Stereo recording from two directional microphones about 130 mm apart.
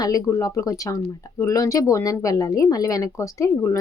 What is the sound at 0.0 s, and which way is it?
Speech, 25° left (ahead or behind).